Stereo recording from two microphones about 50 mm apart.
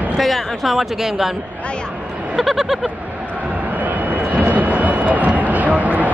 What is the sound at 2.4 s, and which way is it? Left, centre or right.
Speech, centre.